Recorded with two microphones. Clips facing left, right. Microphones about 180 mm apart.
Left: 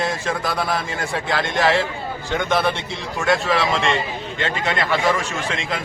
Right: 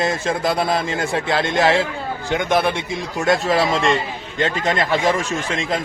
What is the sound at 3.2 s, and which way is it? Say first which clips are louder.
A man's voice: right 2 dB; 40° right (ahead or behind).